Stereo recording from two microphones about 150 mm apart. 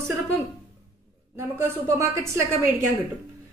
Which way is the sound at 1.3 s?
15° right (ahead or behind).